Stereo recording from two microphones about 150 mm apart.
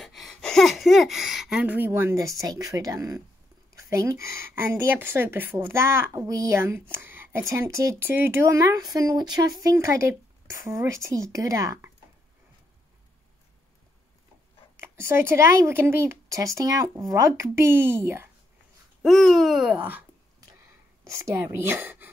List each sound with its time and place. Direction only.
0.0 s speech: centre (ahead or behind); by 11.9 s 20° right (ahead or behind)
14.8 s speech: 15° right (ahead or behind)
19.0 s speech: centre (ahead or behind)
21.0 s speech: 20° right (ahead or behind)